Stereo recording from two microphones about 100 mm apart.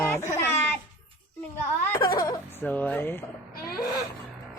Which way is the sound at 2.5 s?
20° left (ahead or behind).